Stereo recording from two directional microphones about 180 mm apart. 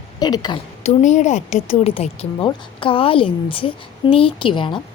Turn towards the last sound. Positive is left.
turn(degrees=25)  # may be behind; listen again after turning